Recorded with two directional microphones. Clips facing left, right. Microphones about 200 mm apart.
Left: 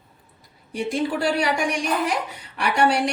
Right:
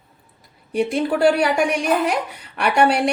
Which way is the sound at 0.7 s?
60° right (ahead or behind).